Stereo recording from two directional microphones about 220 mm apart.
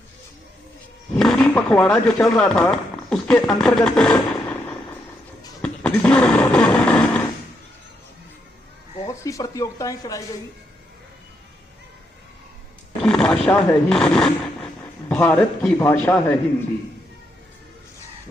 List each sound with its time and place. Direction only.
1.1 s speech: 5° left (ahead or behind)
5.6 s snoring: 5° left (ahead or behind)
9.0 s speech: 15° left (ahead or behind)
13.0 s speech: 5° left (ahead or behind)